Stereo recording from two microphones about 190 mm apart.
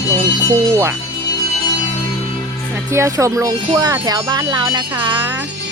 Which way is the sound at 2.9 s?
15° right (ahead or behind).